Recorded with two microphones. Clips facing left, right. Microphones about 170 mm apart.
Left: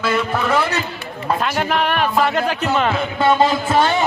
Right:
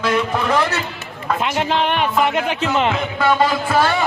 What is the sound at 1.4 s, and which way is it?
A man's voice, 20° right (ahead or behind).